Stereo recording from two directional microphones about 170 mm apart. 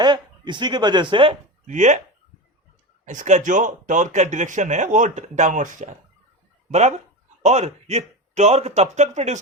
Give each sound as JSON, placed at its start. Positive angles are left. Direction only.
{"t": 0.0, "sound": "speech", "side_deg": -25}
{"t": 1.6, "sound": "speech", "side_deg": -45}
{"t": 3.1, "sound": "speech", "side_deg": -45}